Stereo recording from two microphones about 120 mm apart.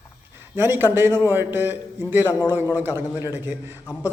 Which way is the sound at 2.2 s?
30° left (ahead or behind).